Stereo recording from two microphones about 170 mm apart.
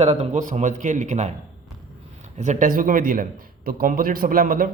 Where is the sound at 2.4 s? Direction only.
45° right (ahead or behind).